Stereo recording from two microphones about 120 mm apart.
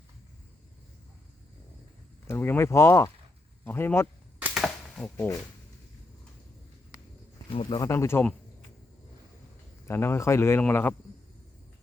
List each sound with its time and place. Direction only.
2.2 s speech: 20° left (ahead or behind)
4.5 s a sound: centre (ahead or behind)
5.0 s speech: 20° left (ahead or behind)
7.5 s speech: 50° left (ahead or behind)
7.8 s speech: 20° left (ahead or behind)
9.8 s speech: 20° left (ahead or behind)